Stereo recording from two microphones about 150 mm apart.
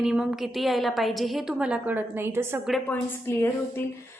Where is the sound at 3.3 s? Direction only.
15° left (ahead or behind).